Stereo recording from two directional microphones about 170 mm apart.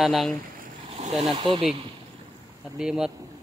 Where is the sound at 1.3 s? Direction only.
30° right (ahead or behind).